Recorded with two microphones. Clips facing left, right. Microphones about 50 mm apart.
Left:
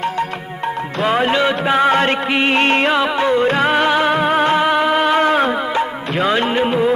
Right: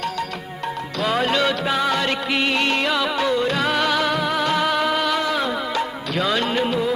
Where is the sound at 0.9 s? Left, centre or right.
Left.